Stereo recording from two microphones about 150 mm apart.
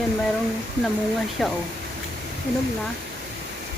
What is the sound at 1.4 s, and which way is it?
Speech, centre (ahead or behind).